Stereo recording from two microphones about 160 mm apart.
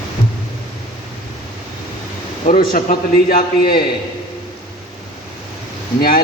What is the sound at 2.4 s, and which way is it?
Speech, 60° left (ahead or behind).